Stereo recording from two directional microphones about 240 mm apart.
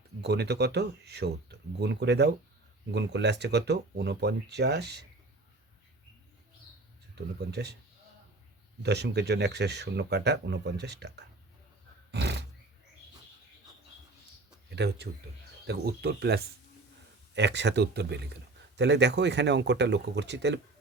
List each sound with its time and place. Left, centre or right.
0.2 s speech: right
7.2 s speech: right
8.8 s speech: right
12.1 s a sound: right
14.7 s speech: right